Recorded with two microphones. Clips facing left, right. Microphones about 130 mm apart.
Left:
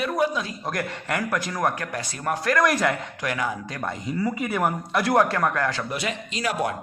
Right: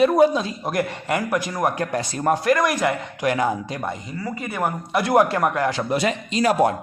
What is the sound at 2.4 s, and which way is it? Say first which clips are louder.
Speech: left 2 dB; 10° right (ahead or behind).